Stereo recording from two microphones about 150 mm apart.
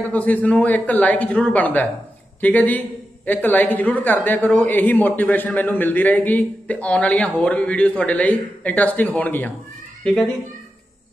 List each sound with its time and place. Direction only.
0.1 s speech: 10° left (ahead or behind)